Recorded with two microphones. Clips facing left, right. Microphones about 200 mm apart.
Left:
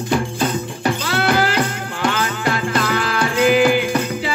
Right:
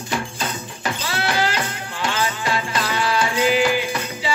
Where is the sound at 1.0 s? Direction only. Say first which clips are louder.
Left 3 dB; 55° left (ahead or behind).